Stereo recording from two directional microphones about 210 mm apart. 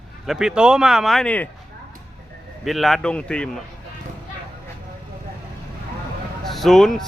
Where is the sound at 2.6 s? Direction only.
Centre (ahead or behind).